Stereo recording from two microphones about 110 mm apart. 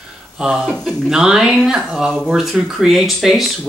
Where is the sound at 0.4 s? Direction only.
5° right (ahead or behind).